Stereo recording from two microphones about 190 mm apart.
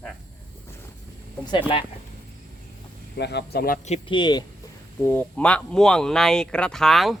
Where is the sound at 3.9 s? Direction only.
25° left (ahead or behind).